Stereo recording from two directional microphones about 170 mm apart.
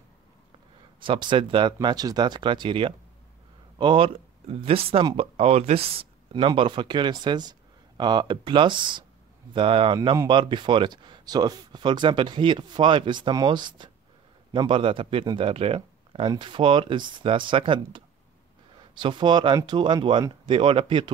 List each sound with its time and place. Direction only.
1.0 s speech: 30° right (ahead or behind)